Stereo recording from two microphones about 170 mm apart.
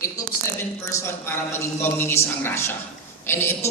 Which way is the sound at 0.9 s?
15° left (ahead or behind).